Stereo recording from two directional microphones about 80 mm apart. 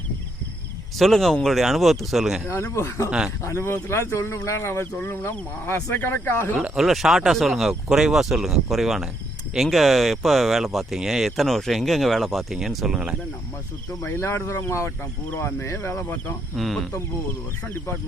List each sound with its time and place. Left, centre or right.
0.9 s speech: centre
2.7 s speech: left
3.1 s speech: centre
3.4 s speech: left
6.7 s speech: centre
14.0 s speech: left
14.8 s speech: left
15.6 s speech: left
16.6 s speech: centre